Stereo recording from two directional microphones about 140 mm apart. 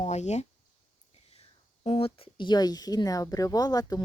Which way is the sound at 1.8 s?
45° left (ahead or behind).